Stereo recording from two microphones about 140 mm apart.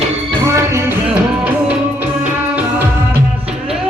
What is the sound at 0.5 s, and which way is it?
Music, 20° right (ahead or behind).